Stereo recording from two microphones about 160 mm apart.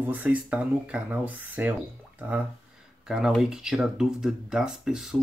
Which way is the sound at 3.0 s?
5° right (ahead or behind).